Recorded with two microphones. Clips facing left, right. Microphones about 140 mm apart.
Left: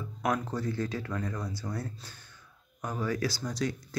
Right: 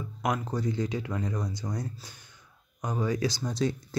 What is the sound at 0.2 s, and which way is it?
Speech, 15° right (ahead or behind).